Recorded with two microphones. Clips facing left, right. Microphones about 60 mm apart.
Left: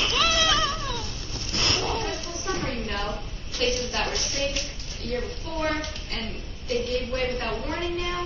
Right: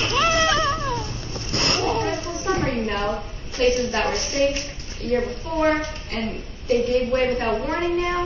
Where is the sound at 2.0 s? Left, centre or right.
Right.